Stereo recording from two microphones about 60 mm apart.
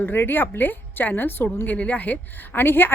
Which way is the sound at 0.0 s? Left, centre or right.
Left.